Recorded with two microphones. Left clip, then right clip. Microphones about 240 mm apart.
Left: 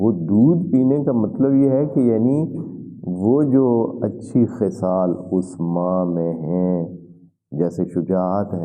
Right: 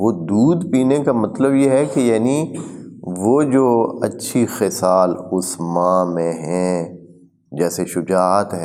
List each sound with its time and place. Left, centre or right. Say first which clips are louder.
0.0 s speech: right 1 dB; right
3.3 s mantra: right 3 dB; centre
4.0 s speech: right 1 dB; centre
5.5 s mantra: right 8 dB; right
7.5 s speech: right 2 dB; centre